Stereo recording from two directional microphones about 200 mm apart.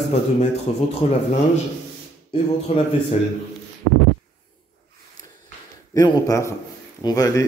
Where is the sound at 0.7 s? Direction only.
30° left (ahead or behind).